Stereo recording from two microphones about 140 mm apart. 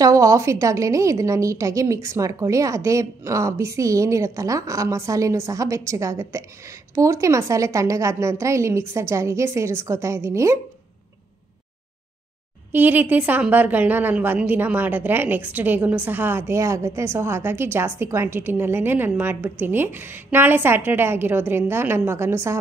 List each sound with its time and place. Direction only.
0.0 s a woman's voice: 25° right (ahead or behind)
12.7 s a woman's voice: 15° right (ahead or behind)